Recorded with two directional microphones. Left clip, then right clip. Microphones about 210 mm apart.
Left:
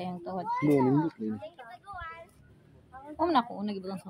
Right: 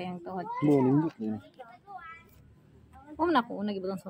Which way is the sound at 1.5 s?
50° left (ahead or behind).